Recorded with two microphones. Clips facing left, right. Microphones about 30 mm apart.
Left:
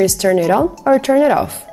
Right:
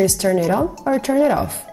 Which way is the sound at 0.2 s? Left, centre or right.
Left.